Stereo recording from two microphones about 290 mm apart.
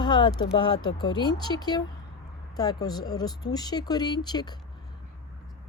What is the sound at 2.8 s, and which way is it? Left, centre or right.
Speech, centre.